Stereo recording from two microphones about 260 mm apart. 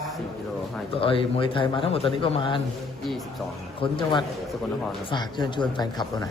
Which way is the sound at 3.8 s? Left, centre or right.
Centre.